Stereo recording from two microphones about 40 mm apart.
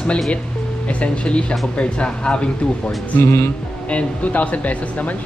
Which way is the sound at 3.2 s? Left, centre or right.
Left.